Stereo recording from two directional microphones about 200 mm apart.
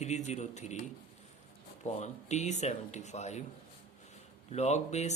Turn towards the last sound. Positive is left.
turn(degrees=35)  # may be behind; listen again after turning